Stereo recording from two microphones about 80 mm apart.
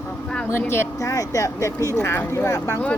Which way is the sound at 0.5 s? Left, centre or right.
Left.